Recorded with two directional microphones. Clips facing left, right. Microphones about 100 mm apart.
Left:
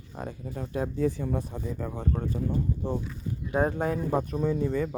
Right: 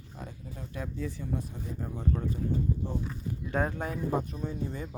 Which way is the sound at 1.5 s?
80° left.